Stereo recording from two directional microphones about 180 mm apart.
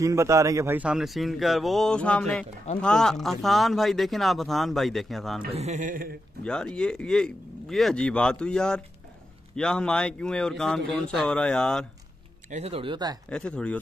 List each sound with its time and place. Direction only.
0.0 s speech: 15° right (ahead or behind); by 5.4 s centre (ahead or behind)
5.5 s speech: 40° right (ahead or behind)
6.4 s speech: 5° left (ahead or behind)
12.4 s speech: 35° right (ahead or behind)
13.3 s speech: 5° left (ahead or behind)